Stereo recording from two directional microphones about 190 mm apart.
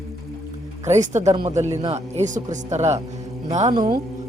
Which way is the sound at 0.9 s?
35° right (ahead or behind).